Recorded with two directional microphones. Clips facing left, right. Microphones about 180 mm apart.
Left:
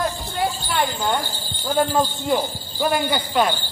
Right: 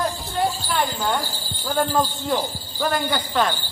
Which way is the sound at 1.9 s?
20° left (ahead or behind).